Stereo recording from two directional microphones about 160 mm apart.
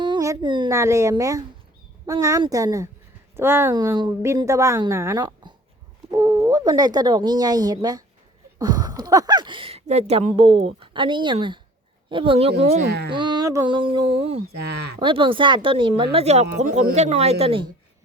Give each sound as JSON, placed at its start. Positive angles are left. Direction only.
{"t": 0.0, "sound": "a sound", "side_deg": -25}
{"t": 0.8, "sound": "a woman's voice", "side_deg": -20}
{"t": 13.1, "sound": "speech", "side_deg": -30}